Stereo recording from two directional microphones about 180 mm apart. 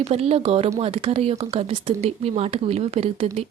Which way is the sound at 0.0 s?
35° right (ahead or behind).